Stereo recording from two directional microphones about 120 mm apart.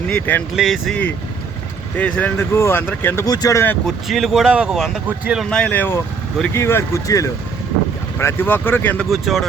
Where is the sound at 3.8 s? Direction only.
Centre (ahead or behind).